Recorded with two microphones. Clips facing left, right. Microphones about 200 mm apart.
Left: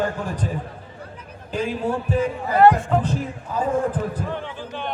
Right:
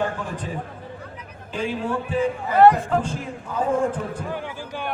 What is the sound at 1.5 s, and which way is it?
Speech, 40° left (ahead or behind).